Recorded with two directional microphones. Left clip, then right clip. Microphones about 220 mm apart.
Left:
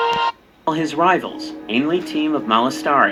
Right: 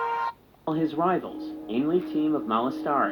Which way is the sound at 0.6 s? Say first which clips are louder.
Left 8 dB; 55° left (ahead or behind).